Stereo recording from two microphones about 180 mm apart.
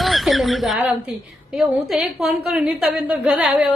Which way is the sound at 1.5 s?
Centre (ahead or behind).